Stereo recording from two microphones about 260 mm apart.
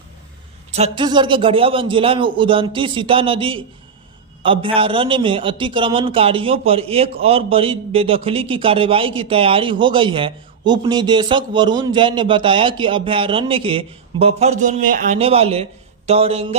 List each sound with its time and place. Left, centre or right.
0.7 s a man's voice: right